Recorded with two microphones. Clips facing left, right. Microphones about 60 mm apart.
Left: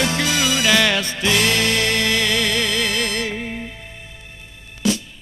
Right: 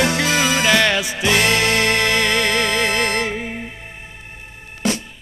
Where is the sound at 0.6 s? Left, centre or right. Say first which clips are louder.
Right 1 dB; centre.